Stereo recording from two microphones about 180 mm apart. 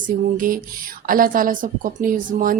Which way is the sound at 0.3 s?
50° right (ahead or behind).